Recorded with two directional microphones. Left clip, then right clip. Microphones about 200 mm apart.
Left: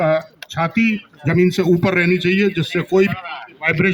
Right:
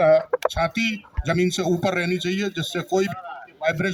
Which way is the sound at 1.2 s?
45° right (ahead or behind).